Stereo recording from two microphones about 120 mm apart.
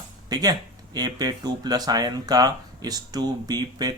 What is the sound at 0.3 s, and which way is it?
Speech, 30° right (ahead or behind).